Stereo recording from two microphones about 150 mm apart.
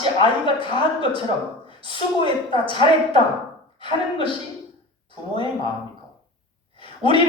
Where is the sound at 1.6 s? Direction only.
35° left (ahead or behind).